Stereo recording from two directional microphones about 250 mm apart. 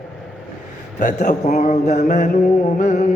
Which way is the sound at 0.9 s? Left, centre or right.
Left.